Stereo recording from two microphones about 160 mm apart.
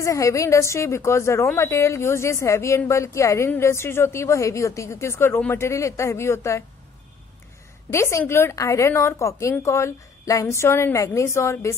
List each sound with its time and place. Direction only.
0.0 s a woman's voice: 20° left (ahead or behind)
7.9 s a woman's voice: 15° left (ahead or behind)